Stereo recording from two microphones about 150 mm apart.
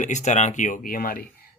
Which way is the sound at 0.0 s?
50° left (ahead or behind).